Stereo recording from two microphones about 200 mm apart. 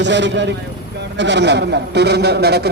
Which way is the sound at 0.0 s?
60° right (ahead or behind).